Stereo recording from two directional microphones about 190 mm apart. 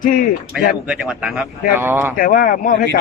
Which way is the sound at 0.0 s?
45° left (ahead or behind).